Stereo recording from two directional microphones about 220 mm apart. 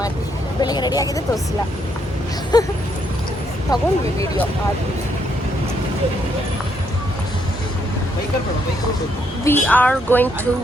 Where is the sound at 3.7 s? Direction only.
15° left (ahead or behind).